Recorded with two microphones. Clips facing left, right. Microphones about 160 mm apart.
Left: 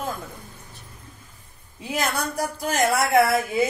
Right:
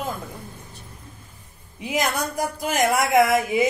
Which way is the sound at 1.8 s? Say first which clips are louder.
Right 2 dB; 15° right (ahead or behind).